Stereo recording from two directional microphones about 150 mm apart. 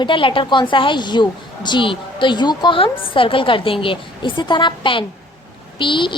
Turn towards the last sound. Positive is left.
turn(degrees=35)  # may be behind; listen again after turning